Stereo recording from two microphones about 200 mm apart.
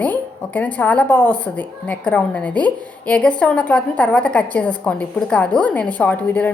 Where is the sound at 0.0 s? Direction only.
10° left (ahead or behind).